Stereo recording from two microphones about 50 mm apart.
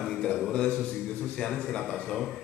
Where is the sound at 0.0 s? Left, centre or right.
Centre.